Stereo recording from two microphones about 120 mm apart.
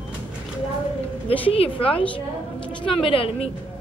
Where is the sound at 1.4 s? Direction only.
50° left (ahead or behind).